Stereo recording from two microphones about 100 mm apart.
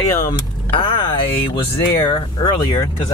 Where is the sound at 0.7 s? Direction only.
60° left (ahead or behind).